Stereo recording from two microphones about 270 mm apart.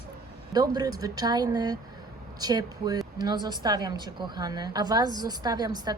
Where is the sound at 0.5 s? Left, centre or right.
Centre.